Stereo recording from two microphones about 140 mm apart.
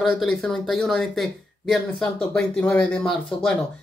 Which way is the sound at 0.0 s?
5° left (ahead or behind).